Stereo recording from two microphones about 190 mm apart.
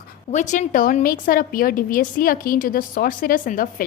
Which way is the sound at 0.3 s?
40° left (ahead or behind).